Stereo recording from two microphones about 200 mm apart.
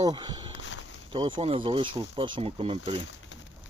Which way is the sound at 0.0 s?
25° right (ahead or behind).